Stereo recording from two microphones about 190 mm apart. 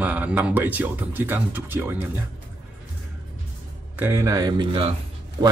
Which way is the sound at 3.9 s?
15° right (ahead or behind).